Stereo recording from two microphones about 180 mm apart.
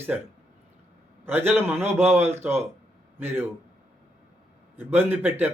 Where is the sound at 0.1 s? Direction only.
5° right (ahead or behind).